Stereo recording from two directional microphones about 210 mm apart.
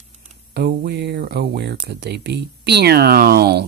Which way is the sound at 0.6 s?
50° right (ahead or behind).